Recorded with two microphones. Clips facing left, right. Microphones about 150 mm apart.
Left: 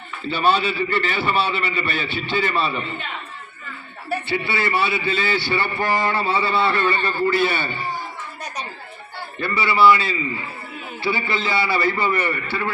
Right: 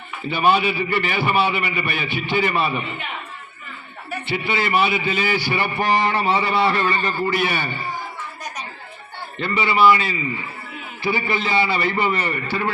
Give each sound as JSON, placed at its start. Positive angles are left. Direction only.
{"t": 0.2, "sound": "a man's voice", "side_deg": -15}
{"t": 4.3, "sound": "a man's voice", "side_deg": -20}
{"t": 9.4, "sound": "a man's voice", "side_deg": -20}